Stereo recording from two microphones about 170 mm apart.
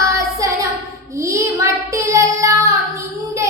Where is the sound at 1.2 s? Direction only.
20° right (ahead or behind).